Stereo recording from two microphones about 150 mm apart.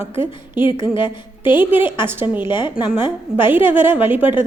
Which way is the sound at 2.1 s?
15° right (ahead or behind).